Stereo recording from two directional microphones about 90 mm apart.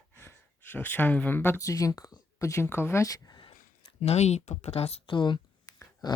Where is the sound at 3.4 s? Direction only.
90° left.